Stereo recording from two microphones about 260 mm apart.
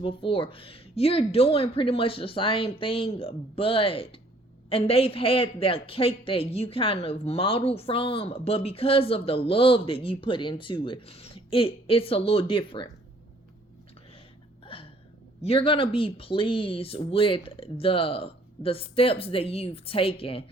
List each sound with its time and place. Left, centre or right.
0.0 s a man's voice: centre
14.6 s hiccup: centre
15.4 s a man's voice: left